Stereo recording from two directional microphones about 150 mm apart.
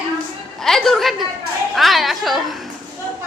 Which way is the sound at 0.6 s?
Centre (ahead or behind).